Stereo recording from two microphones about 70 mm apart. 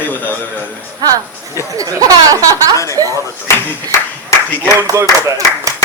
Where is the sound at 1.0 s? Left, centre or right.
Right.